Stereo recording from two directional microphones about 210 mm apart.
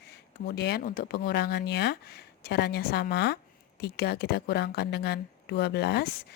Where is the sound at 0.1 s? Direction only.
50° left (ahead or behind).